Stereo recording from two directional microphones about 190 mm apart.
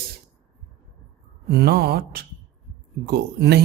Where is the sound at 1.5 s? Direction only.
55° right (ahead or behind).